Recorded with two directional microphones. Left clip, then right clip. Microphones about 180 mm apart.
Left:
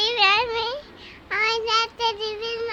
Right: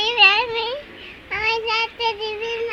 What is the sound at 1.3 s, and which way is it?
Child singing, 25° left (ahead or behind).